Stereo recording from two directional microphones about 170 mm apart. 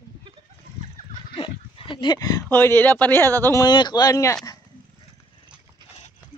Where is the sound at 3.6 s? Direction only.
25° left (ahead or behind).